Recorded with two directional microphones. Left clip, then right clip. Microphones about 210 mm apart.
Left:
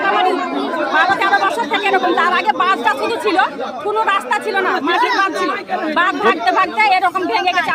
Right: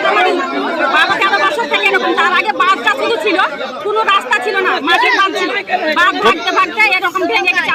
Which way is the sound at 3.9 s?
25° left (ahead or behind).